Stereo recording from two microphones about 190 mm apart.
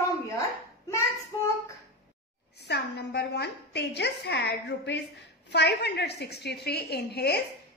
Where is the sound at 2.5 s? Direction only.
60° left (ahead or behind).